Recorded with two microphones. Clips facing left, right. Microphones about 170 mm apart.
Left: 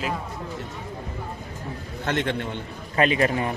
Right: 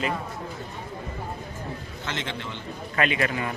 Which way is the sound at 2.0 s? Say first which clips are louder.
Left 8 dB; 55° left (ahead or behind).